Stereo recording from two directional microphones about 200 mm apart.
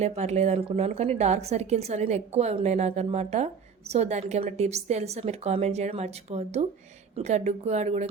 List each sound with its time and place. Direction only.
0.0 s a woman's voice: 35° right (ahead or behind)